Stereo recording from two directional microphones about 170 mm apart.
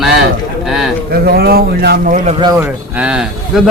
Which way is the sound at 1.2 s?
65° right (ahead or behind).